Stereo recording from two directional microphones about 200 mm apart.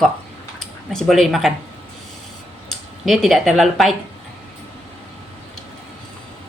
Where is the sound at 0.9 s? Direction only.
Centre (ahead or behind).